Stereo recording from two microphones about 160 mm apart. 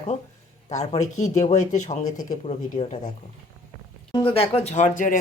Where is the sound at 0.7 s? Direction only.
45° left (ahead or behind).